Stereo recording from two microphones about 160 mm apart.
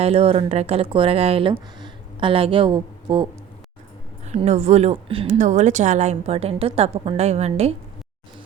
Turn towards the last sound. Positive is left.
turn(degrees=-40)  # may be behind; listen again after turning